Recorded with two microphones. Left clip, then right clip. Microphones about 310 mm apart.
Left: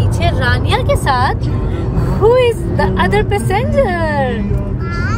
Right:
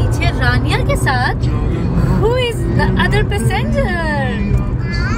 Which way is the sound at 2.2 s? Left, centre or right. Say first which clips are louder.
Left 7 dB; left.